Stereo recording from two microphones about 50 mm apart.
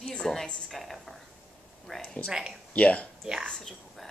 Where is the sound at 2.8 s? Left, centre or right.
Left.